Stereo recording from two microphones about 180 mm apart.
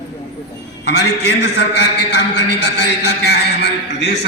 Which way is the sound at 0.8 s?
70° left (ahead or behind).